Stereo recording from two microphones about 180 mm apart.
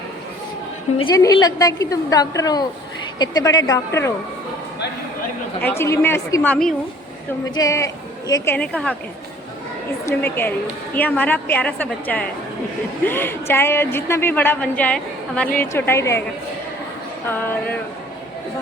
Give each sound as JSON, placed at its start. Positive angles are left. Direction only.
{"t": 1.1, "sound": "a woman's voice", "side_deg": 20}
{"t": 5.6, "sound": "a woman's voice", "side_deg": 15}
{"t": 7.5, "sound": "a woman's voice", "side_deg": 20}
{"t": 10.1, "sound": "a woman's voice", "side_deg": 10}
{"t": 17.2, "sound": "a woman's voice", "side_deg": 10}